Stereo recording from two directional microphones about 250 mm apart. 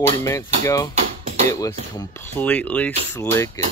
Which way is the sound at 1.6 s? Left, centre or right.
Centre.